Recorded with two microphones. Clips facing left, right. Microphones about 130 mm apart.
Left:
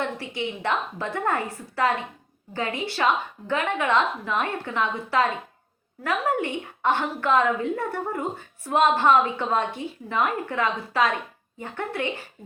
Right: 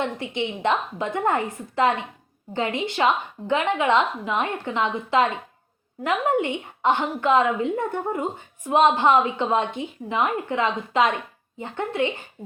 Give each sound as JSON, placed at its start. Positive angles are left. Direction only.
{"t": 0.0, "sound": "a woman's voice", "side_deg": -20}